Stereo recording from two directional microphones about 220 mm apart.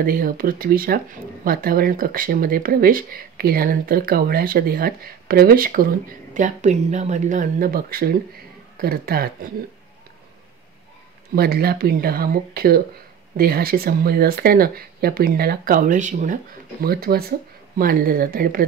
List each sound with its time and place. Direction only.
0.0 s speech: 40° right (ahead or behind)
11.3 s speech: 45° right (ahead or behind)